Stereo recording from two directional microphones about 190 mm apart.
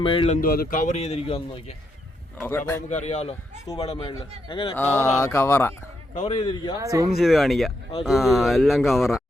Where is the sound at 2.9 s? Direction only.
35° left (ahead or behind).